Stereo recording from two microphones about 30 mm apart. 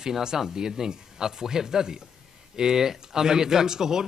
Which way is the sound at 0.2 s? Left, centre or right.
Centre.